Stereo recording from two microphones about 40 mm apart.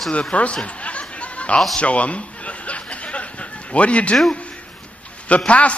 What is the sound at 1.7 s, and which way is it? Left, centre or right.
Chuckle, left.